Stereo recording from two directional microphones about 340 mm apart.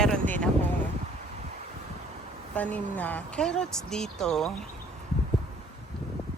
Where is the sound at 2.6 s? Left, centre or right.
Centre.